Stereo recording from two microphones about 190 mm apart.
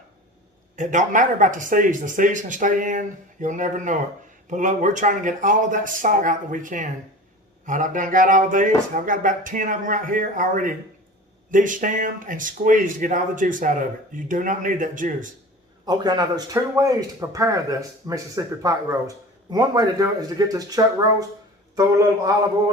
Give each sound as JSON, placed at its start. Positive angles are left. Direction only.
{"t": 0.8, "sound": "speech", "side_deg": -40}
{"t": 15.9, "sound": "a man's voice", "side_deg": -20}